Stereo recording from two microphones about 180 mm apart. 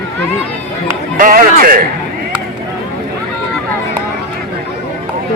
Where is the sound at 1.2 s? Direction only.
50° right (ahead or behind).